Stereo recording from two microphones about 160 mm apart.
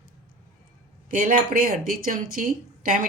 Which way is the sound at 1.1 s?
60° right (ahead or behind).